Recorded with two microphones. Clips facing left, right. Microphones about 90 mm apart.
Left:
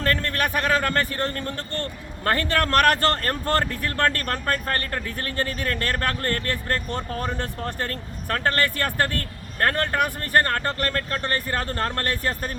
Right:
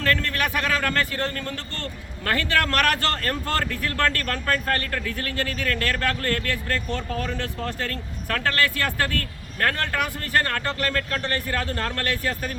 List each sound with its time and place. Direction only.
0.0 s speech: 40° left (ahead or behind)